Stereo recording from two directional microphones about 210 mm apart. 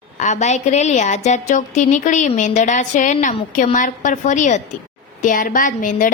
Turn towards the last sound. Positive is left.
turn(degrees=40)  # may be behind; listen again after turning